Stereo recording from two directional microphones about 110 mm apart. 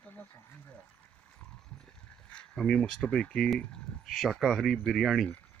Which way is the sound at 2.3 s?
5° left (ahead or behind).